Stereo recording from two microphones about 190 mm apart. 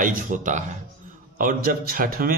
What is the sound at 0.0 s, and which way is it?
Speech, 45° right (ahead or behind).